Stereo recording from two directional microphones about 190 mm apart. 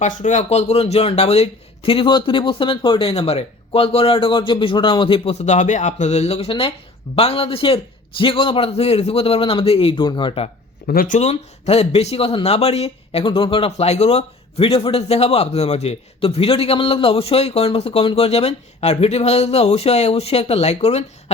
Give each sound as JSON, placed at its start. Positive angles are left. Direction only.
{"t": 0.0, "sound": "a man's voice", "side_deg": 40}
{"t": 10.8, "sound": "speech", "side_deg": 45}